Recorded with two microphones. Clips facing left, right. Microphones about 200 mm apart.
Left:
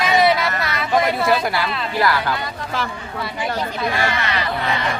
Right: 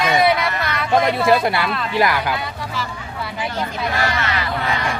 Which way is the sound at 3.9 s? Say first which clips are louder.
Even; 20° left (ahead or behind).